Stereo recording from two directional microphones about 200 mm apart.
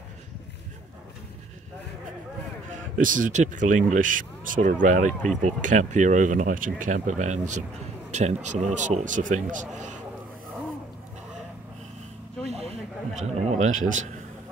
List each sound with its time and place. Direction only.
3.0 s speech: 40° right (ahead or behind)
12.4 s snake: 30° right (ahead or behind)
13.2 s speech: 35° right (ahead or behind)